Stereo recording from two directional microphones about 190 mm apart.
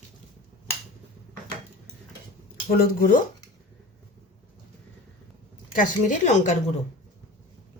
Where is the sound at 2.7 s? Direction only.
50° left (ahead or behind).